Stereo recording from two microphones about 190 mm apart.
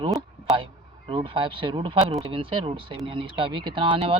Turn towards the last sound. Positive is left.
turn(degrees=-30)  # may be behind; listen again after turning